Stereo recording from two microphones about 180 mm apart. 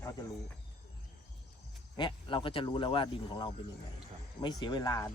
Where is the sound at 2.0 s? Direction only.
25° left (ahead or behind).